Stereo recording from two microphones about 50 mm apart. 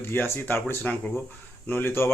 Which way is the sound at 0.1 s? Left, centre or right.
Left.